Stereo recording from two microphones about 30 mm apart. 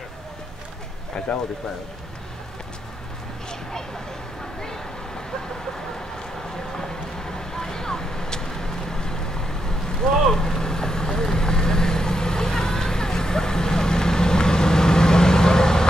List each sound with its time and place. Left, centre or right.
6.7 s vehicle: centre